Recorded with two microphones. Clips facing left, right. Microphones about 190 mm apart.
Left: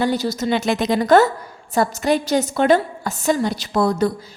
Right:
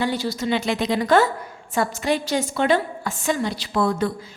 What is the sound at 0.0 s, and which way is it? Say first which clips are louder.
A woman's voice: left 4 dB; 40° left (ahead or behind).